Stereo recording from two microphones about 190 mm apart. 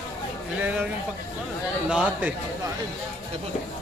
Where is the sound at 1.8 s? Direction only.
5° right (ahead or behind).